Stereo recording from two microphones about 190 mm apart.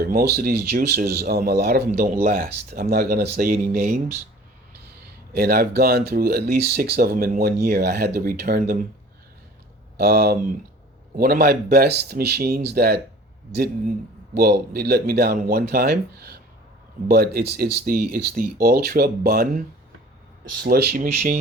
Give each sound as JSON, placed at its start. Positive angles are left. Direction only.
{"t": 0.0, "sound": "speech", "side_deg": -55}
{"t": 5.3, "sound": "speech", "side_deg": -55}
{"t": 10.0, "sound": "speech", "side_deg": -55}
{"t": 20.7, "sound": "speech", "side_deg": -55}